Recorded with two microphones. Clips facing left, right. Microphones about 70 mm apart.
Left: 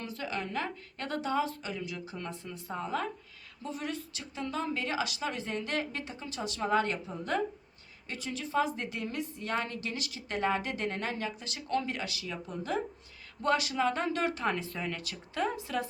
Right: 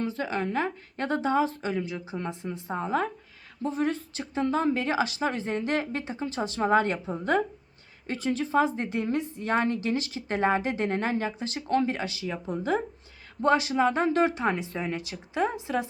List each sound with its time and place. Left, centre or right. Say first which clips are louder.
0.0 s a woman's voice: right 7 dB; right